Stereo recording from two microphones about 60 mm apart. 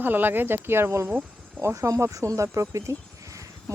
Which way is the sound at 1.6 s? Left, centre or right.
Right.